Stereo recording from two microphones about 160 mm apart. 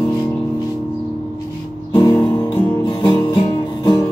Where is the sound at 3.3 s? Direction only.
25° left (ahead or behind).